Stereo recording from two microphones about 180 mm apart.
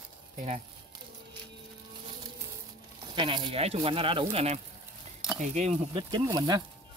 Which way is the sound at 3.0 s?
25° right (ahead or behind).